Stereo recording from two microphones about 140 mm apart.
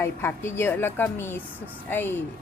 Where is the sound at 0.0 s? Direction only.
15° left (ahead or behind).